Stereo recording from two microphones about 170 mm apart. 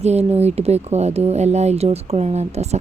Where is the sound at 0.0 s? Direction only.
40° right (ahead or behind).